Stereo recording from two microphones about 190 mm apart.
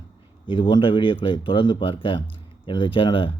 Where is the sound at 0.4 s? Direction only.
25° left (ahead or behind).